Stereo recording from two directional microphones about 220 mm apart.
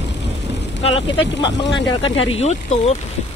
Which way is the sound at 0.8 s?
25° left (ahead or behind).